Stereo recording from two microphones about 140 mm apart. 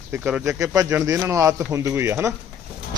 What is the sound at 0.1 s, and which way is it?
Speech, 10° right (ahead or behind).